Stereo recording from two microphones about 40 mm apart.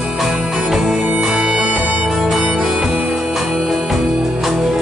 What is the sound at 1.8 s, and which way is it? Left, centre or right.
Music, right.